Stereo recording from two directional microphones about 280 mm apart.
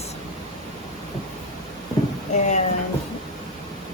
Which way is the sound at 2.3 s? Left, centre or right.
Left.